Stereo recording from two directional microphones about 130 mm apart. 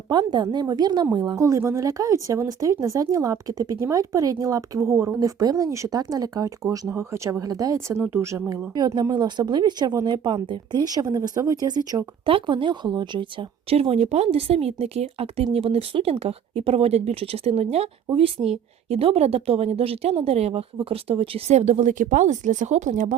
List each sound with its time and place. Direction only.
0.1 s speech: 35° right (ahead or behind)
1.4 s speech: 20° right (ahead or behind)
8.7 s speech: 30° right (ahead or behind)
12.2 s speech: 40° right (ahead or behind)
13.7 s speech: 50° right (ahead or behind); by 23.1 s 70° right (ahead or behind)